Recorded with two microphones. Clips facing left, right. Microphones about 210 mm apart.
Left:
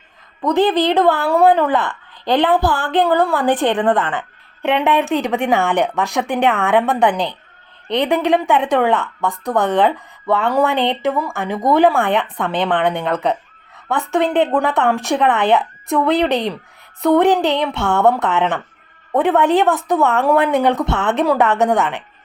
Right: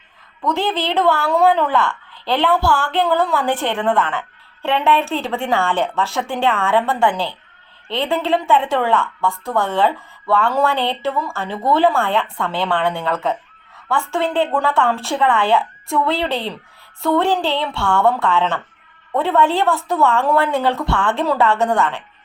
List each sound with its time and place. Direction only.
0.4 s a woman's voice: 15° left (ahead or behind)